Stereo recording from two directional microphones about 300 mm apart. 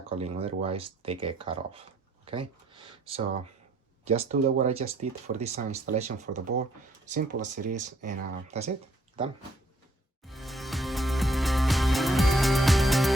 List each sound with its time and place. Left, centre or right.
0.1 s speech: centre
4.3 s speech: right
10.2 s music: centre